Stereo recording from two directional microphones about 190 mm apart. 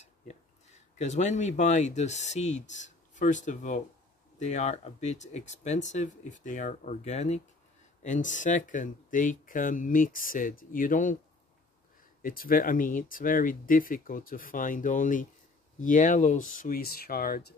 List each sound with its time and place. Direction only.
0.3 s speech: 35° left (ahead or behind)
12.2 s speech: 50° left (ahead or behind)